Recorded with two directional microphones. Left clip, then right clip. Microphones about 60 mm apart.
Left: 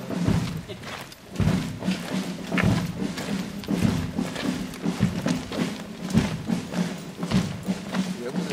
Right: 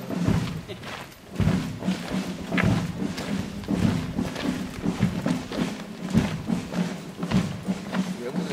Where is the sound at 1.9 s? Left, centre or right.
Left.